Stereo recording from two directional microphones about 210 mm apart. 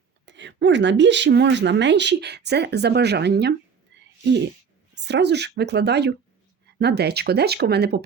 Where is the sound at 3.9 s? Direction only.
55° right (ahead or behind).